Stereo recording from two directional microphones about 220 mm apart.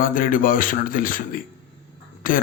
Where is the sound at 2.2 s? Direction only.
40° left (ahead or behind).